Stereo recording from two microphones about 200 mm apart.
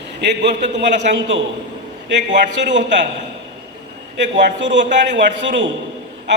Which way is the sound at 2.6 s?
60° right (ahead or behind).